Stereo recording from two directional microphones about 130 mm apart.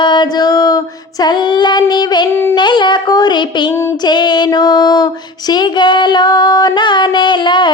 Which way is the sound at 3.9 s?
35° left (ahead or behind).